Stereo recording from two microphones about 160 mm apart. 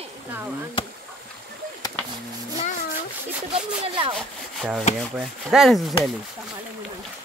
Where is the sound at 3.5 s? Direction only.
35° right (ahead or behind).